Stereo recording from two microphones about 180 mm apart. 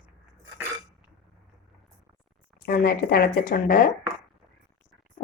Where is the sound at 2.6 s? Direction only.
55° left (ahead or behind).